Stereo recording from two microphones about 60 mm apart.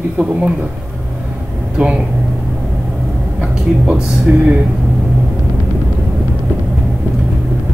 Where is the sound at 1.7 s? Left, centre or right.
Centre.